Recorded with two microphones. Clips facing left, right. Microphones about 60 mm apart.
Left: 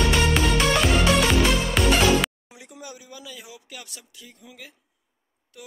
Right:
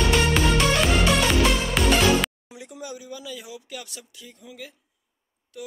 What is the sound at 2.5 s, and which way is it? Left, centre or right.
Speech, left.